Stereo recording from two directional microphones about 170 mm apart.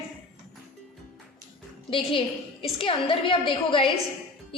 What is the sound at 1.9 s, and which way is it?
A woman's voice, 30° left (ahead or behind).